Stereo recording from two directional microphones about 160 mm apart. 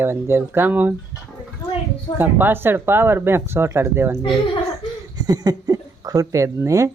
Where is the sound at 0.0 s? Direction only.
15° right (ahead or behind).